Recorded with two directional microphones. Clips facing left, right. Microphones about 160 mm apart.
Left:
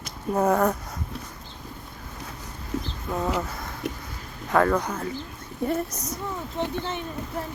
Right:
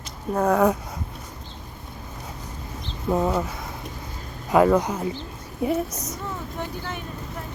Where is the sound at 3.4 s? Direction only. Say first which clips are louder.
Right 1 dB; 5° right (ahead or behind).